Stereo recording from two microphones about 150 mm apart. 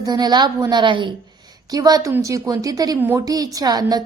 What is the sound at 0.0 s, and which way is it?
A woman's voice, 25° right (ahead or behind).